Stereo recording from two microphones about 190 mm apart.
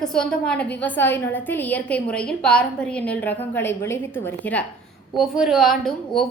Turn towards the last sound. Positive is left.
turn(degrees=0)  # may be behind; listen again after turning